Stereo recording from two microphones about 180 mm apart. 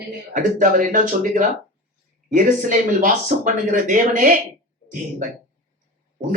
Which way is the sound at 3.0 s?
50° right (ahead or behind).